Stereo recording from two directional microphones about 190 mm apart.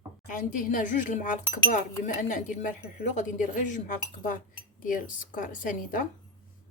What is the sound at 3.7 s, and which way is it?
Speech, 40° left (ahead or behind).